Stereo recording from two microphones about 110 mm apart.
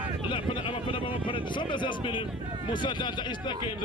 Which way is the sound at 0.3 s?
45° left (ahead or behind).